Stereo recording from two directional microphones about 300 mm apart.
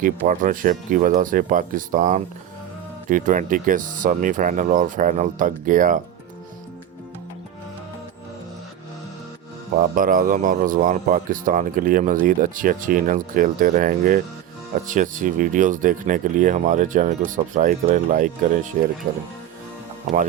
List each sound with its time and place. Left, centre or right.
0.0 s speech: right
9.9 s speech: right